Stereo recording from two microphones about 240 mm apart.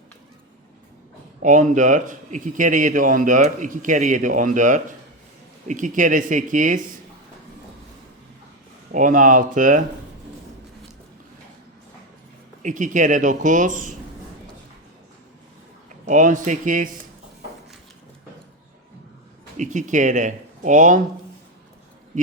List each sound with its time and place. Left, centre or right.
1.4 s a man's voice: right
8.9 s a man's voice: right
12.6 s a man's voice: right
16.0 s a man's voice: right
19.5 s a man's voice: right